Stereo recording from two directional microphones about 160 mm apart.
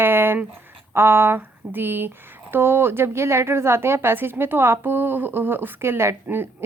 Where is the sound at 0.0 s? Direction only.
15° right (ahead or behind).